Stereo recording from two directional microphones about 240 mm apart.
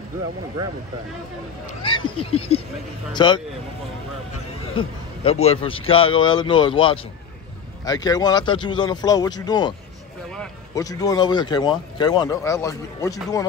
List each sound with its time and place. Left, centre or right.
1.8 s a man's voice: left
4.7 s a man's voice: left